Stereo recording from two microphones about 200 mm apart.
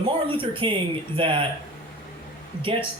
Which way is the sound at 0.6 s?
25° right (ahead or behind).